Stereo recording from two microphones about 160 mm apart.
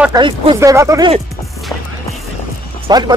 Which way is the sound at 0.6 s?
20° right (ahead or behind).